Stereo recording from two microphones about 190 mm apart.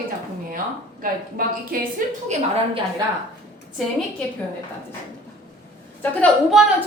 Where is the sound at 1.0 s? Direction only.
50° right (ahead or behind).